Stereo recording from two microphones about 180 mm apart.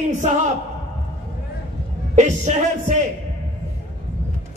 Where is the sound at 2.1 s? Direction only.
40° right (ahead or behind).